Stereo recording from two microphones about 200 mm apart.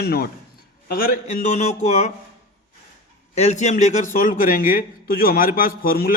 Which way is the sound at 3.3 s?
35° left (ahead or behind).